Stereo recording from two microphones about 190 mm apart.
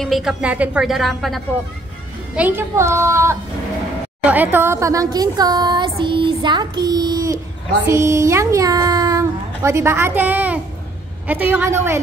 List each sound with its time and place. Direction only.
0.0 s a woman's voice: centre (ahead or behind)